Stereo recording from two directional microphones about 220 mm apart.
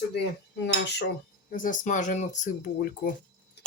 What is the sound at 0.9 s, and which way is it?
Speech, 50° left (ahead or behind).